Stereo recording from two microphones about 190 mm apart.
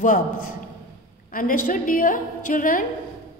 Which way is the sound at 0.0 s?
45° left (ahead or behind).